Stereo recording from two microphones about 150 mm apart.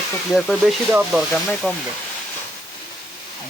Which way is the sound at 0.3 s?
Centre (ahead or behind).